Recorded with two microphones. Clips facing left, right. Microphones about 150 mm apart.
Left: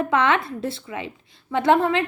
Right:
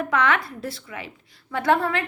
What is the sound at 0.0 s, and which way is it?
A woman's voice, 25° left (ahead or behind).